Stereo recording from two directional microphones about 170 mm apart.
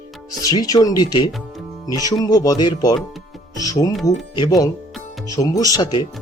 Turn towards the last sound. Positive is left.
turn(degrees=25)  # may be behind; listen again after turning